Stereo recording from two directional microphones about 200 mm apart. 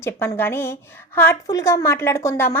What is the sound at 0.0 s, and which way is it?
A woman's voice, 10° left (ahead or behind).